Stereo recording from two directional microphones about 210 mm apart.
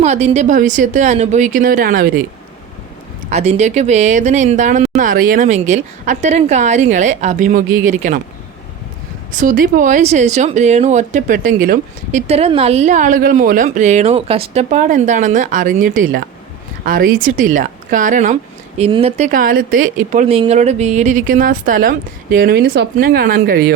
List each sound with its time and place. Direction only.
0.0 s speech: 30° right (ahead or behind)
3.2 s speech: 30° right (ahead or behind)
9.3 s speech: 40° right (ahead or behind)